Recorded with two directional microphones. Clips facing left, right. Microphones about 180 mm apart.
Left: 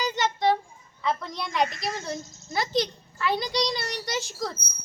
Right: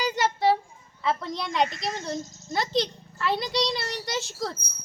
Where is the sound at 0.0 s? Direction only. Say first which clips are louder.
Right 1 dB; 10° right (ahead or behind).